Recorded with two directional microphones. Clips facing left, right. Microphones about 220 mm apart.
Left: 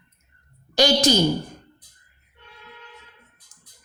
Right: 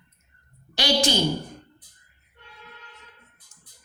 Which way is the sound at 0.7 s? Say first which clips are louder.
Left 5 dB; 40° left (ahead or behind).